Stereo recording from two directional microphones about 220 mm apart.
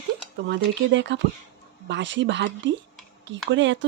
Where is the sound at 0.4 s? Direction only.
55° right (ahead or behind).